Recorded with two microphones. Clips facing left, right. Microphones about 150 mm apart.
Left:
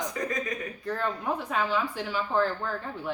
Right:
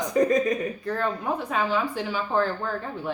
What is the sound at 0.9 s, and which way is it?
Speech, centre (ahead or behind).